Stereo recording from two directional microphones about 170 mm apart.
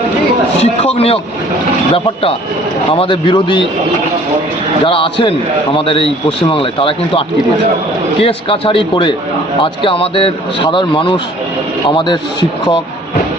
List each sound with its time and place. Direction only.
0.6 s speech: 35° left (ahead or behind)
5.7 s speech: 30° left (ahead or behind)